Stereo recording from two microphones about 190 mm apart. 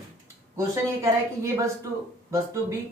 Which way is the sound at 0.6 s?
15° right (ahead or behind).